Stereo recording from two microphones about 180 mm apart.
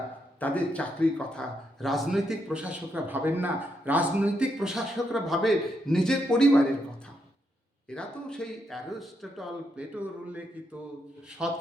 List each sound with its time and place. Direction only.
0.3 s a man's voice: 10° left (ahead or behind)
7.9 s a man's voice: 5° left (ahead or behind)